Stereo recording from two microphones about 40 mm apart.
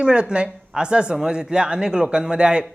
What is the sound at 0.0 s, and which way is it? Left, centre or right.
Speech, right.